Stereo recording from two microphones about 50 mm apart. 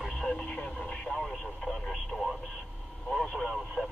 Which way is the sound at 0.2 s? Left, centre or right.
Left.